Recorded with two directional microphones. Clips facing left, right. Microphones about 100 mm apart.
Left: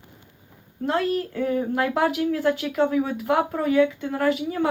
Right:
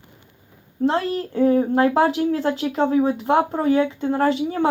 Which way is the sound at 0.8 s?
30° right (ahead or behind).